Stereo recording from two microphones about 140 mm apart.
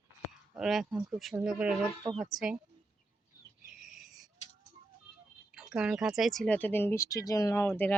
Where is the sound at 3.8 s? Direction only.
5° right (ahead or behind).